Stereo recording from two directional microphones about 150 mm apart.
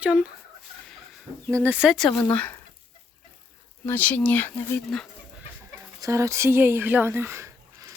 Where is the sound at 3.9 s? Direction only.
10° left (ahead or behind).